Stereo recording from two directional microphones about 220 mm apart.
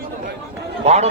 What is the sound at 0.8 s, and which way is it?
Speech, 30° right (ahead or behind).